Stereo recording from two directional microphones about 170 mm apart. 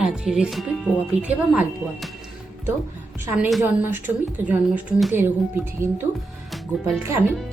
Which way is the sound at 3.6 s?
10° right (ahead or behind).